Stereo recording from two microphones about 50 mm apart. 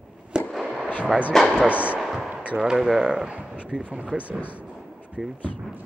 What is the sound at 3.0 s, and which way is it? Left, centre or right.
Speech, right.